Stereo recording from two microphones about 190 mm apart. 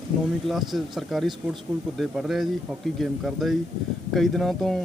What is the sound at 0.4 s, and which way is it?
Speech, centre (ahead or behind).